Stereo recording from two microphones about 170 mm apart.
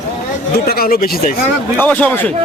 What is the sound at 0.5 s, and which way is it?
Speech, 65° left (ahead or behind).